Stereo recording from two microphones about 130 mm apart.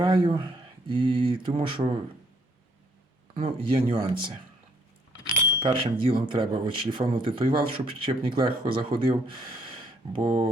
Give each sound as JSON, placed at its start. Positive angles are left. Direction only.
{"t": 0.0, "sound": "speech", "side_deg": -40}
{"t": 3.3, "sound": "speech", "side_deg": -45}
{"t": 5.2, "sound": "speech", "side_deg": -40}